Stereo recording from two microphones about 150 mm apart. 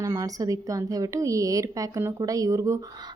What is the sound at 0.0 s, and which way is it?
A woman's voice, 20° right (ahead or behind).